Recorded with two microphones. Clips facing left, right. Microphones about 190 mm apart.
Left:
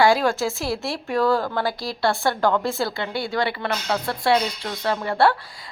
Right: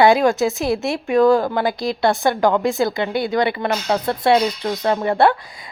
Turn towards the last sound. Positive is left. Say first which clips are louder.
# right 3 dB
turn(degrees=-20)  # may be behind; listen again after turning